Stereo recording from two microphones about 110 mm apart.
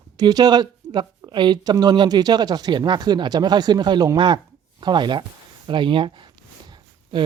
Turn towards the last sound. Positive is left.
turn(degrees=-45)  # may be behind; listen again after turning